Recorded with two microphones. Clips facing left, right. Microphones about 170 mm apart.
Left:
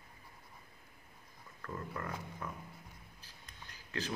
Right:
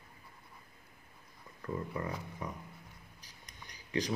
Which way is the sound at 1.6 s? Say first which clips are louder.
Right 5 dB; 15° right (ahead or behind).